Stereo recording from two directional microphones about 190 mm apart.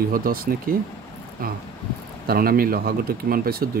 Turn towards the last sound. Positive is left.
turn(degrees=-50)  # may be behind; listen again after turning